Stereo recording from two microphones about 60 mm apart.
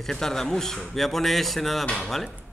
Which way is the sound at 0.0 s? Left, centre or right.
Centre.